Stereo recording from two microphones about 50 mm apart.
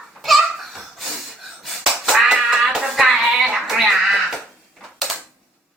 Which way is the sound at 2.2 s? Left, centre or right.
Right.